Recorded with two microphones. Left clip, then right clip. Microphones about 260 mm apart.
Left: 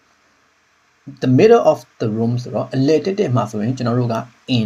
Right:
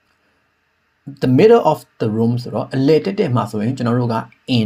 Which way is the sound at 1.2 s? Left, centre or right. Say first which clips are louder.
Even; centre.